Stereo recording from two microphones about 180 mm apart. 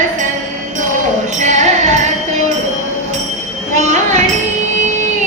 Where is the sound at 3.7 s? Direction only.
45° right (ahead or behind).